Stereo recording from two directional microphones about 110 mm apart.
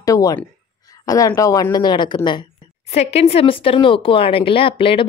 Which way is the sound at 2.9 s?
75° left (ahead or behind).